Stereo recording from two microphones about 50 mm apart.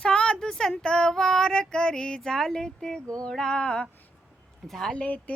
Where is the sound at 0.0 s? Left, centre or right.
Left.